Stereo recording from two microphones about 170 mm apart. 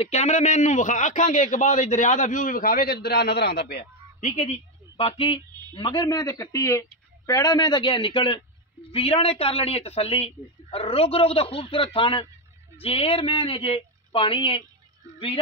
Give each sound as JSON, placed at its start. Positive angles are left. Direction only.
{"t": 0.0, "sound": "a man's voice", "side_deg": 40}
{"t": 4.2, "sound": "a woman's voice", "side_deg": 45}